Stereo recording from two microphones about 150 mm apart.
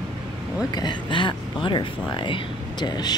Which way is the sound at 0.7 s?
30° left (ahead or behind).